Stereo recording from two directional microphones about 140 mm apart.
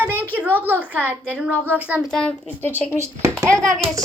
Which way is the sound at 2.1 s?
5° left (ahead or behind).